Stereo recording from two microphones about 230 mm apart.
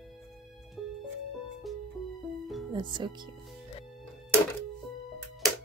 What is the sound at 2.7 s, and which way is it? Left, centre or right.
Speech, right.